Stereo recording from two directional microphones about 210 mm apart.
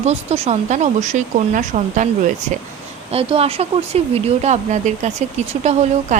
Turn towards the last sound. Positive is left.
turn(degrees=-35)  # may be behind; listen again after turning